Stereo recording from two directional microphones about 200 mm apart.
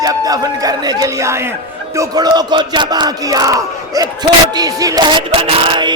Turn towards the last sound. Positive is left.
turn(degrees=-25)  # may be behind; listen again after turning